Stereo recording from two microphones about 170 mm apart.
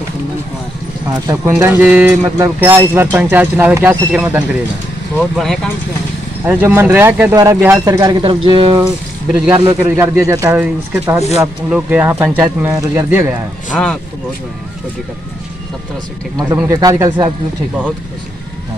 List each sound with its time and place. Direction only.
1.2 s speech: 15° right (ahead or behind)
5.3 s speech: centre (ahead or behind)
6.4 s speech: 10° right (ahead or behind)
9.8 s speech: 15° right (ahead or behind)
13.7 s speech: 5° left (ahead or behind)
16.3 s speech: 20° right (ahead or behind)